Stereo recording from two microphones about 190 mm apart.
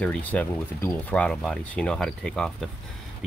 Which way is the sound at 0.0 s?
10° left (ahead or behind).